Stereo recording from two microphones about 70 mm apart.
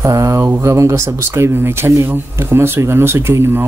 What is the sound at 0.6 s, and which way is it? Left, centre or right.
Speech, right.